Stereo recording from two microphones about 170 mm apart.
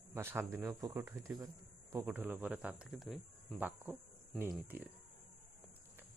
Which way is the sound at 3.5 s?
10° right (ahead or behind).